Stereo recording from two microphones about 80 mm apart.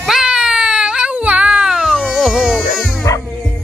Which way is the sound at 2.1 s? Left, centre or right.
Centre.